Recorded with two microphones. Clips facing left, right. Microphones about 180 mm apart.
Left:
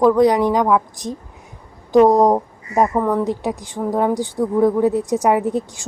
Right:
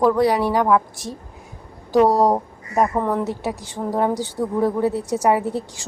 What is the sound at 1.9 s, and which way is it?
A woman's voice, 20° left (ahead or behind).